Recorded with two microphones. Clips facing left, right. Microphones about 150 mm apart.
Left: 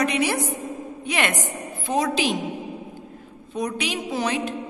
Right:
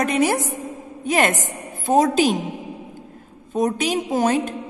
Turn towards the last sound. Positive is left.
turn(degrees=-45)  # may be behind; listen again after turning